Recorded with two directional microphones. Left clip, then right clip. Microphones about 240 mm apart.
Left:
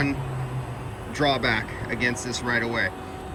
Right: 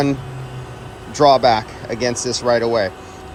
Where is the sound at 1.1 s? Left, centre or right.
Centre.